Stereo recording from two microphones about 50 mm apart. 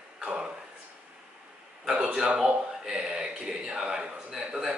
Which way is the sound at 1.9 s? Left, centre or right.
Centre.